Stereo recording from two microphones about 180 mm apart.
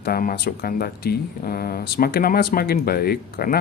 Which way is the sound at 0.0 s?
55° left (ahead or behind).